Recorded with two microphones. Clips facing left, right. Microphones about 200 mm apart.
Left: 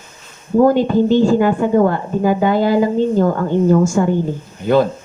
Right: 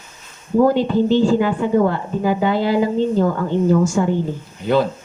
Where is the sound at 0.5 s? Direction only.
50° left (ahead or behind).